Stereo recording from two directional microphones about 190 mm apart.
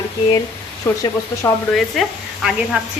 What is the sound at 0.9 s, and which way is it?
Speech, 15° left (ahead or behind).